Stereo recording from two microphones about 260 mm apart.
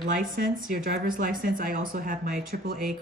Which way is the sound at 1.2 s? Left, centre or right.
Right.